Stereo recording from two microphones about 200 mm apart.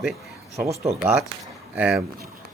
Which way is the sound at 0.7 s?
35° right (ahead or behind).